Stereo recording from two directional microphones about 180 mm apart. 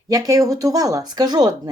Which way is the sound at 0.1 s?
20° right (ahead or behind).